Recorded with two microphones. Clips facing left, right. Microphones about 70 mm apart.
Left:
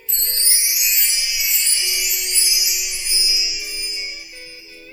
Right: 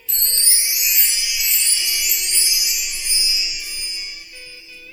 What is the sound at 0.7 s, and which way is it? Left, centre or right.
Music, centre.